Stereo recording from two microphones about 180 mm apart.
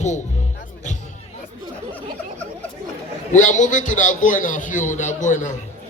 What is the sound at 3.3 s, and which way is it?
A man's voice, 45° left (ahead or behind).